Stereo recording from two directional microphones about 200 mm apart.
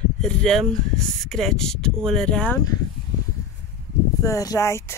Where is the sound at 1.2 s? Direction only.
Centre (ahead or behind).